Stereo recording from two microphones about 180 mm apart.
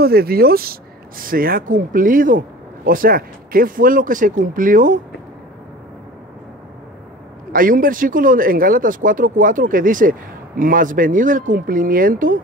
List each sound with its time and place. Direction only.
0.0 s speech: 60° right (ahead or behind)
7.5 s speech: 50° right (ahead or behind)